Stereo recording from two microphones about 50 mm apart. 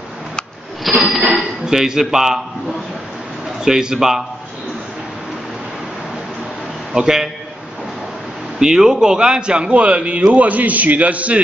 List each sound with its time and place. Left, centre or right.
0.8 s a sound: centre
1.3 s speech: centre
3.6 s speech: centre
6.9 s a man's voice: centre
8.5 s a man's voice: centre